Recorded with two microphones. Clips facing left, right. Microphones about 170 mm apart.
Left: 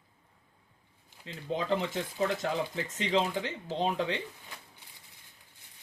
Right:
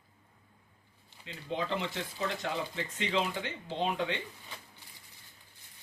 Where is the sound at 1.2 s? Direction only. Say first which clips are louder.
Left 2 dB; 40° left (ahead or behind).